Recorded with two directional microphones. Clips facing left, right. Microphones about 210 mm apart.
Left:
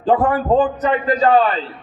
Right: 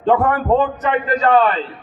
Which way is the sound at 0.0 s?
35° left (ahead or behind).